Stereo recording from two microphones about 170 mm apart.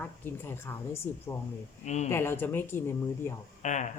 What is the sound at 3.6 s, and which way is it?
Speech, 45° left (ahead or behind).